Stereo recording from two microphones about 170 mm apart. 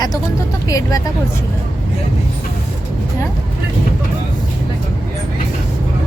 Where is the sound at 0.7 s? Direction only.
20° left (ahead or behind).